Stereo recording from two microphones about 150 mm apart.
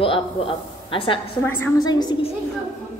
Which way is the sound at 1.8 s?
25° left (ahead or behind).